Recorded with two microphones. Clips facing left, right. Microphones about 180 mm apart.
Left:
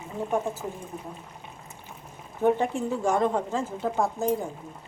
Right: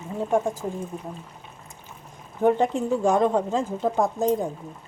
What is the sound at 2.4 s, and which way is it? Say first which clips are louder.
A woman's voice: right 3 dB; 15° right (ahead or behind).